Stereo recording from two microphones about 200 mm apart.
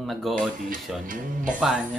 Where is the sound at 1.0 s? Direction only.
40° right (ahead or behind).